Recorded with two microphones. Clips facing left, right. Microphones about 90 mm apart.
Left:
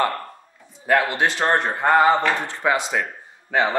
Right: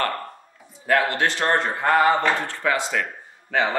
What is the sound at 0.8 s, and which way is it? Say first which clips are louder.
Speech: left 1 dB; 15° left (ahead or behind).